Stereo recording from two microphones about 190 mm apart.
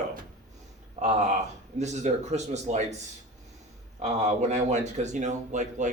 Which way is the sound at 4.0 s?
35° right (ahead or behind).